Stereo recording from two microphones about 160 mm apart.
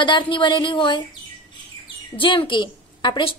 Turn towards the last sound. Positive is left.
turn(degrees=30)  # may be behind; listen again after turning